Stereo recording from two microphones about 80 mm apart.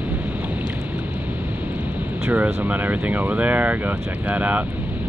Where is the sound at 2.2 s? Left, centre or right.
Right.